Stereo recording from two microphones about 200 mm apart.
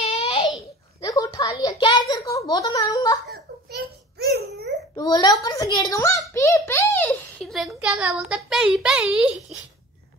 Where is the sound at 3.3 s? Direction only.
55° right (ahead or behind).